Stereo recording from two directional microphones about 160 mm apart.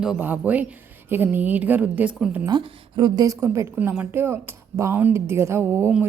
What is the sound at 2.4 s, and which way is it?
A woman's voice, 30° right (ahead or behind).